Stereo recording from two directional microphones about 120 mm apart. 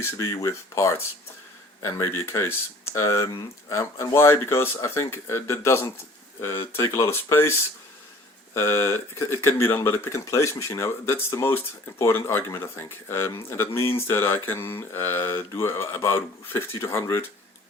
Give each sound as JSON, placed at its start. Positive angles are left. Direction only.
{"t": 0.0, "sound": "speech", "side_deg": 25}
{"t": 8.5, "sound": "speech", "side_deg": 20}